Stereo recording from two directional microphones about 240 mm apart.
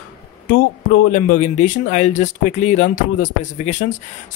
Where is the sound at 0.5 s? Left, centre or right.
Left.